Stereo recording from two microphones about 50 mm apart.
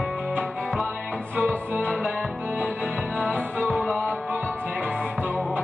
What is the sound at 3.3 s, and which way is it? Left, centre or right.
Music, centre.